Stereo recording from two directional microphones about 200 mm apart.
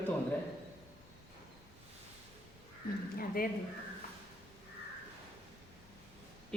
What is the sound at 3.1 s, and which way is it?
Speech, 45° left (ahead or behind).